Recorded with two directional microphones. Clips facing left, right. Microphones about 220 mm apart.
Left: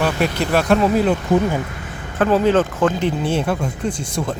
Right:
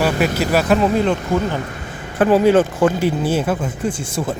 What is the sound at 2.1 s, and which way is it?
Speech, 10° right (ahead or behind).